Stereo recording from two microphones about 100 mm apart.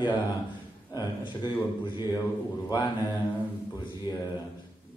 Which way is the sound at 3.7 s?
40° left (ahead or behind).